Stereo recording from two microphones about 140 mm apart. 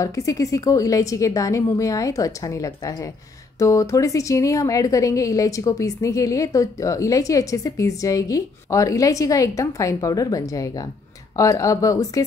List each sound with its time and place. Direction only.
0.0 s a woman's voice: 25° left (ahead or behind)